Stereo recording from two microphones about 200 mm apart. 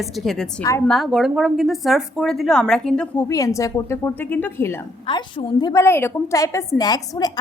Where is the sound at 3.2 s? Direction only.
15° left (ahead or behind).